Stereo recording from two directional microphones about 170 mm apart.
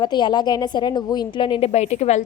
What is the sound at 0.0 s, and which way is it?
A woman's voice, 25° left (ahead or behind).